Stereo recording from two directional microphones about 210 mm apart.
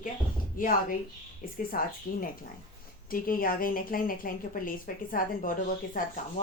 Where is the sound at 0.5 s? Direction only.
40° left (ahead or behind).